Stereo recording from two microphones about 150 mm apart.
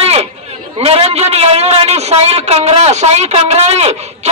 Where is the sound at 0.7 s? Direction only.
40° right (ahead or behind).